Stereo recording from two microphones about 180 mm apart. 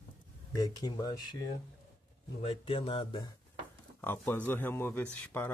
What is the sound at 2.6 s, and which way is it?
Speech, 30° left (ahead or behind).